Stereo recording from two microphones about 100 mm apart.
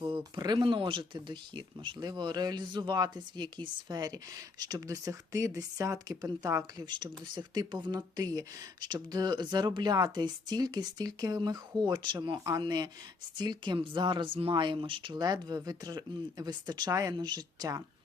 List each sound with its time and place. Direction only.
0.0 s speech: 40° right (ahead or behind)
6.8 s speech: 45° right (ahead or behind)